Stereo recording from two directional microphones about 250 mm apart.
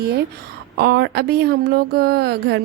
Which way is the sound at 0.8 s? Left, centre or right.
Right.